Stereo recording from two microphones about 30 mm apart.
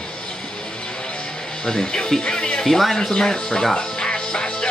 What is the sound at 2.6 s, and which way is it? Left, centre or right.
Speech, centre.